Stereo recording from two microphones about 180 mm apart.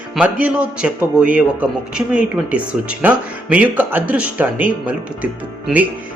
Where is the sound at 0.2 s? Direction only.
5° right (ahead or behind).